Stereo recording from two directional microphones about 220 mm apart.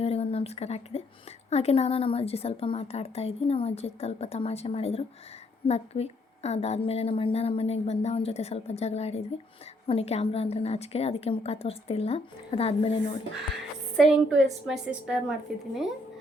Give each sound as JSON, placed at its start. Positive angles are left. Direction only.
{"t": 0.0, "sound": "a woman's voice", "side_deg": 25}
{"t": 13.9, "sound": "a woman's voice", "side_deg": 0}